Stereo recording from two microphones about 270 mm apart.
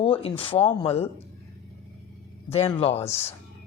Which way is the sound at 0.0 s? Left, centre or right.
Left.